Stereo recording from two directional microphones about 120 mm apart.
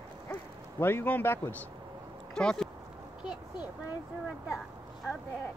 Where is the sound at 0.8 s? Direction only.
20° left (ahead or behind).